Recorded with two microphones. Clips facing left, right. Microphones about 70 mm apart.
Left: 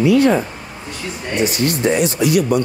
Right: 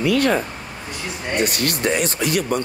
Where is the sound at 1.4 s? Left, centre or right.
Right.